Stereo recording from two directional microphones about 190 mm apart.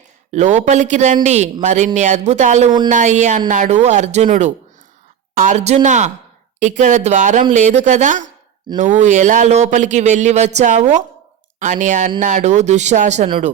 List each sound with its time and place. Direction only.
0.3 s speech: 40° right (ahead or behind)